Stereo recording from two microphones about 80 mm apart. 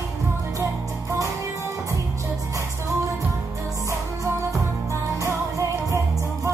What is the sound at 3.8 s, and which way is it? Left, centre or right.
Music, right.